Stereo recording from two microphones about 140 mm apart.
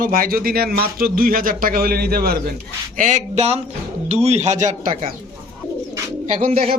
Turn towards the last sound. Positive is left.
turn(degrees=-65)  # may be behind; listen again after turning